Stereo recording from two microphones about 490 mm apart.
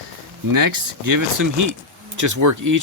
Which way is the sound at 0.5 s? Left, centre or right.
Right.